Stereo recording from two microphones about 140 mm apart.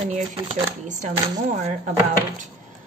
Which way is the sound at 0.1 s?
60° right (ahead or behind).